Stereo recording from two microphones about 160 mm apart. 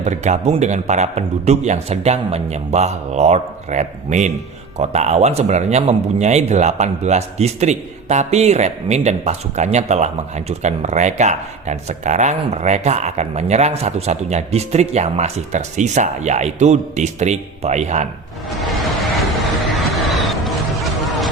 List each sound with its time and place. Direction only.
0.0 s speech: 45° right (ahead or behind)
19.1 s music: centre (ahead or behind)